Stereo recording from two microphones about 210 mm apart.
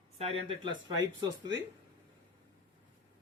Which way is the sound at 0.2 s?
25° right (ahead or behind).